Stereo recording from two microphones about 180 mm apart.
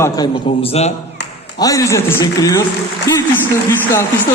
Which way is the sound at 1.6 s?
20° left (ahead or behind).